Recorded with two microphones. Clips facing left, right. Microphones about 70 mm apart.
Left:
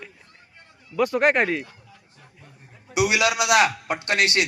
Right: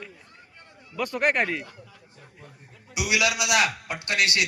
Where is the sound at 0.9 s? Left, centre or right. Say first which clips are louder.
Left 5 dB; centre.